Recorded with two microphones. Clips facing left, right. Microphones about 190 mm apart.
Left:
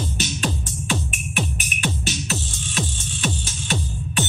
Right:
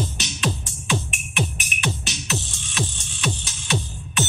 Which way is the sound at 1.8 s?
40° left (ahead or behind).